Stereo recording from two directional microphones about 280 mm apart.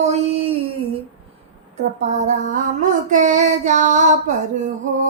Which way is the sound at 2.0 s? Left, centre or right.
Right.